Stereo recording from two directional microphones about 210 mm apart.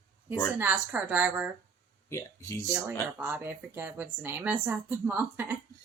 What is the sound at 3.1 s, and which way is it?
Speech, 10° right (ahead or behind).